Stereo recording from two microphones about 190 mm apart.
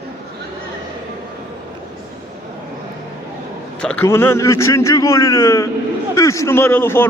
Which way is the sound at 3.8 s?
5° left (ahead or behind).